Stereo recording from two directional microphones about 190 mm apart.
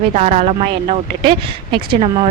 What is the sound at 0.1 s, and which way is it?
A woman's voice, 35° right (ahead or behind).